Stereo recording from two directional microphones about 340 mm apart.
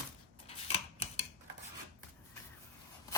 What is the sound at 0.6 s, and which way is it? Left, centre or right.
Scissors, centre.